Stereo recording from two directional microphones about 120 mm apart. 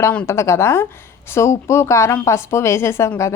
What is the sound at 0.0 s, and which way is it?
A woman's voice, 15° left (ahead or behind).